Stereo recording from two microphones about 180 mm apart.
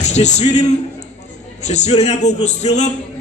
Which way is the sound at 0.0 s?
40° left (ahead or behind).